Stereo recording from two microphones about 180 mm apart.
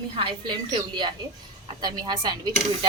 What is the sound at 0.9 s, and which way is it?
Speech, 25° right (ahead or behind).